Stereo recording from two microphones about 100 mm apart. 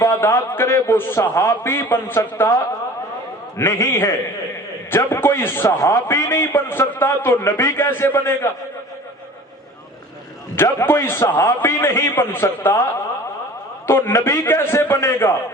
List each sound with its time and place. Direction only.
0.0 s a man's voice: 30° left (ahead or behind)
3.7 s a man's voice: 30° left (ahead or behind)
10.5 s a man's voice: 25° left (ahead or behind)
14.4 s a man's voice: 20° left (ahead or behind)